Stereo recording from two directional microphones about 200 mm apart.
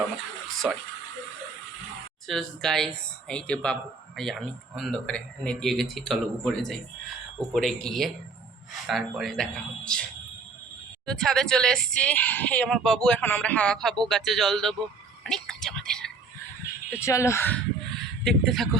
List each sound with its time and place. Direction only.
0.6 s speech: centre (ahead or behind)
2.2 s speech: centre (ahead or behind)
15.3 s whispering: 5° left (ahead or behind)
17.0 s speech: 15° left (ahead or behind)
18.2 s speech: centre (ahead or behind)